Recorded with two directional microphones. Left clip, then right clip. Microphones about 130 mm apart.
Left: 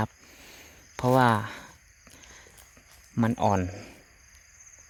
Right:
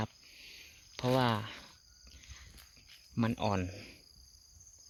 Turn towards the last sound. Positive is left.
turn(degrees=20)  # may be behind; listen again after turning